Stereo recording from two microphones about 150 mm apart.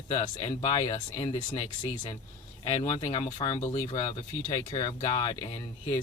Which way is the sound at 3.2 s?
25° left (ahead or behind).